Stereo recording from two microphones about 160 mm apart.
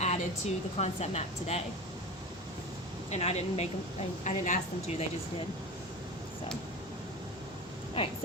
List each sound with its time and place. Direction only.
0.0 s a woman's voice: 45° left (ahead or behind)
3.1 s a woman's voice: 40° left (ahead or behind)